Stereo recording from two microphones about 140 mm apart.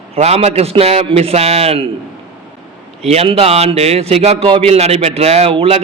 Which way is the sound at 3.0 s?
45° right (ahead or behind).